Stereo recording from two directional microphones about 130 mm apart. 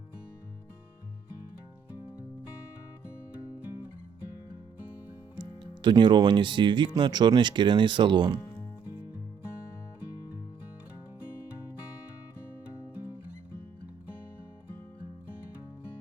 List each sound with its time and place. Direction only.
5.4 s speech: 35° right (ahead or behind)